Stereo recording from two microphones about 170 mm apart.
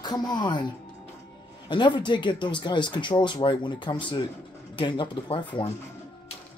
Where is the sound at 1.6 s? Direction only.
25° left (ahead or behind).